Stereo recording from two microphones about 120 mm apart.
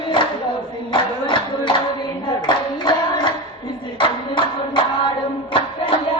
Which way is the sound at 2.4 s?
40° left (ahead or behind).